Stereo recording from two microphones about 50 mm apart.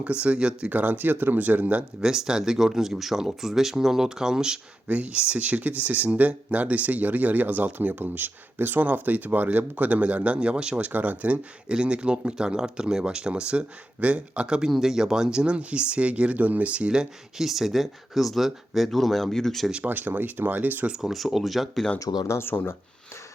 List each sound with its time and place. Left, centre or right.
0.0 s speech: right
0.7 s speech: right
2.0 s speech: centre
4.9 s speech: right
10.8 s speech: right
11.7 s speech: centre
19.7 s speech: right
21.0 s speech: centre
22.3 s speech: left